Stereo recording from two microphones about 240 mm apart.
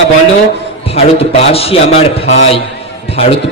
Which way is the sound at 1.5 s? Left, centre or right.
Left.